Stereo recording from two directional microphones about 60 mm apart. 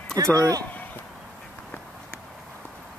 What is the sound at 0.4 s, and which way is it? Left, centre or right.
Speech, right.